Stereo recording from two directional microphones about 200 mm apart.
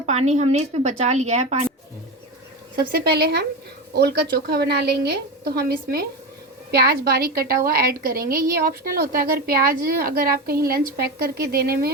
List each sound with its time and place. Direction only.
0.0 s a woman's voice: 35° right (ahead or behind)
2.9 s a woman's voice: 55° right (ahead or behind)